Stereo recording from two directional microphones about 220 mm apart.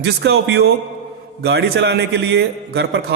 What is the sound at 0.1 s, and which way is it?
A man's voice, 50° right (ahead or behind).